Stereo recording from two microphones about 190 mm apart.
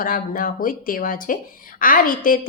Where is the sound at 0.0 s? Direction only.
45° left (ahead or behind).